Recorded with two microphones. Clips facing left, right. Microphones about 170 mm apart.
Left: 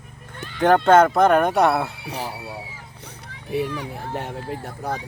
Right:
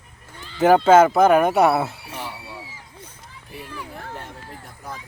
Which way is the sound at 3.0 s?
75° left (ahead or behind).